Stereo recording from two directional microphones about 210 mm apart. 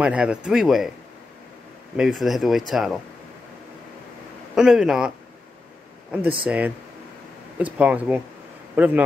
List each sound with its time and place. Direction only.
0.0 s speech: 5° right (ahead or behind)
2.0 s speech: centre (ahead or behind)
4.6 s speech: centre (ahead or behind)
6.4 s a man's voice: 5° right (ahead or behind)